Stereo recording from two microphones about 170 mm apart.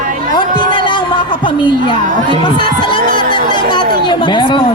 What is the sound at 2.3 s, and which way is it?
Speech, 25° left (ahead or behind).